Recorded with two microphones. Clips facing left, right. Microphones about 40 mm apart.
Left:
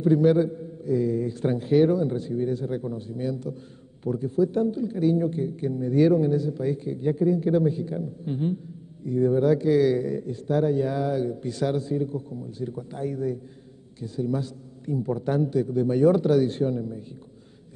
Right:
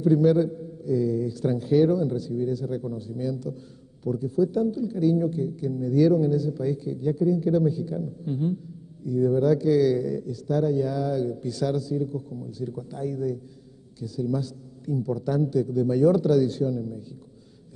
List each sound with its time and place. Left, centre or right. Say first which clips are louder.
0.0 s speech: even; left